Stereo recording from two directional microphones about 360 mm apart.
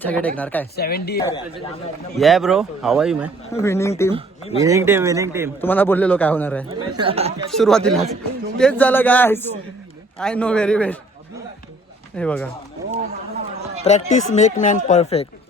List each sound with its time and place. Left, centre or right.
0.0 s a man's voice: centre
0.8 s speech: left
2.1 s a man's voice: centre
3.5 s speech: centre
4.6 s speech: centre
5.5 s a man's voice: centre
6.7 s speech: centre
7.5 s a man's voice: centre
12.1 s a man's voice: centre
13.8 s speech: centre